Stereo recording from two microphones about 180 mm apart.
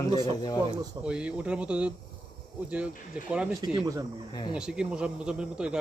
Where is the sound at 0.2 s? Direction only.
25° left (ahead or behind).